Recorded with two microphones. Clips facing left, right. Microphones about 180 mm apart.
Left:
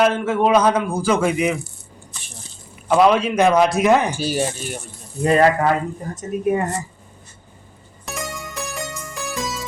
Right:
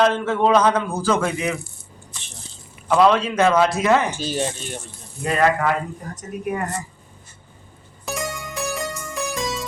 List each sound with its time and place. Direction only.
0.0 s a man's voice: 10° left (ahead or behind)
2.9 s a man's voice: 15° left (ahead or behind)
5.2 s speech: 35° left (ahead or behind)
8.0 s music: centre (ahead or behind)